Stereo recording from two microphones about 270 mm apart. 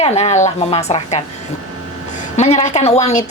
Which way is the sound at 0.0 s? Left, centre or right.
Left.